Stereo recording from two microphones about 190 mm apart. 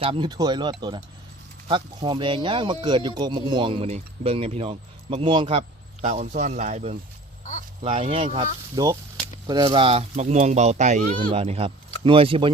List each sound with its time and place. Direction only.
0.0 s speech: 25° right (ahead or behind)
8.7 s speech: 20° right (ahead or behind)